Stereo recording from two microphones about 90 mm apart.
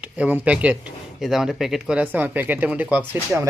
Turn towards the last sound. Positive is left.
turn(degrees=-20)  # may be behind; listen again after turning